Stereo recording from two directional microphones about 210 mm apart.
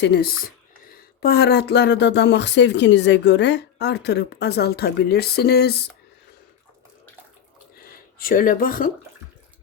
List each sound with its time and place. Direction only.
0.0 s speech: 50° left (ahead or behind)
8.2 s speech: 40° left (ahead or behind)